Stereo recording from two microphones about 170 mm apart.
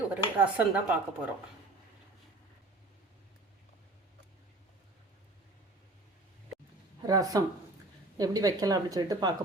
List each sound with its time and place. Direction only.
0.1 s speech: 10° right (ahead or behind)
7.1 s speech: 20° right (ahead or behind)